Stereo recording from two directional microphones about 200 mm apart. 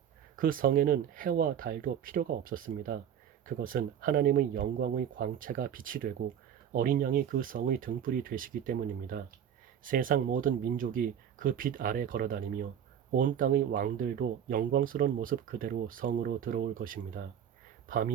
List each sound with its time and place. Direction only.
0.3 s speech: 45° right (ahead or behind)